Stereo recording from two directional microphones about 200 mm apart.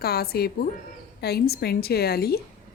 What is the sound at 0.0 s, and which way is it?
A woman's voice, 50° left (ahead or behind).